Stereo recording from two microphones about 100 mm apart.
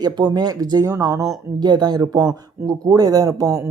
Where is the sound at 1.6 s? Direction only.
45° right (ahead or behind).